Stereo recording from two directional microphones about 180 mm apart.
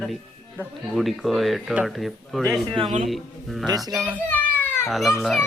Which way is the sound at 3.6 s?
20° right (ahead or behind).